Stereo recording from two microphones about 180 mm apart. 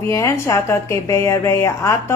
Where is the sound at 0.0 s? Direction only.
15° left (ahead or behind).